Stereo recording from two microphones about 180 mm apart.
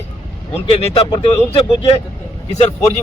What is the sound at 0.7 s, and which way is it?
A man's voice, 30° left (ahead or behind).